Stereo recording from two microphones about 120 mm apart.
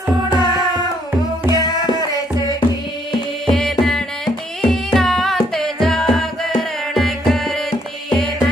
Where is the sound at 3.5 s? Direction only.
5° left (ahead or behind).